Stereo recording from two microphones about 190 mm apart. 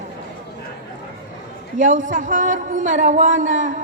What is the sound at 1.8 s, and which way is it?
A man's voice, 45° right (ahead or behind).